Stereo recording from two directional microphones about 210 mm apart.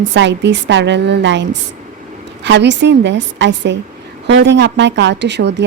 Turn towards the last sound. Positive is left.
turn(degrees=-55)  # may be behind; listen again after turning